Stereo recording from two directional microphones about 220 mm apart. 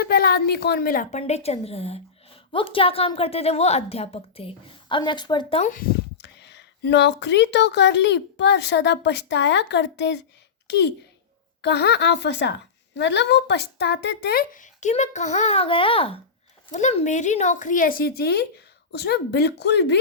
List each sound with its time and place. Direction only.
0.0 s a woman's voice: 45° left (ahead or behind)
1.2 s a woman's voice: 30° left (ahead or behind); by 20.0 s 50° left (ahead or behind)